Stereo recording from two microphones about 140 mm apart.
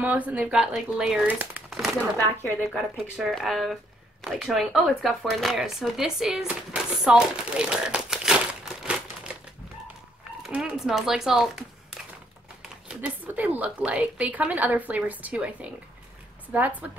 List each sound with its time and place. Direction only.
0.0 s speech: 10° right (ahead or behind)
10.4 s speech: 5° right (ahead or behind)
12.8 s speech: 10° right (ahead or behind)